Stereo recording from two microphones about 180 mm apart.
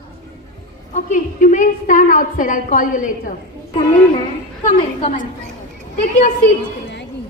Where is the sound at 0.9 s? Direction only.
45° left (ahead or behind).